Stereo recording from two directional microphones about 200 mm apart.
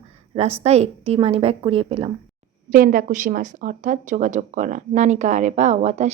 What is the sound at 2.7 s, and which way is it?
Speech, 45° right (ahead or behind).